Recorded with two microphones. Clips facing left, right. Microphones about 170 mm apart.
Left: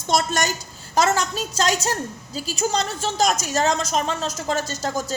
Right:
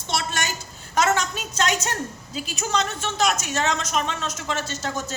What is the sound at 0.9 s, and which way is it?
A woman's voice, 35° left (ahead or behind).